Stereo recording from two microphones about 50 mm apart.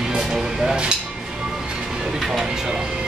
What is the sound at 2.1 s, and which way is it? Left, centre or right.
Speech, centre.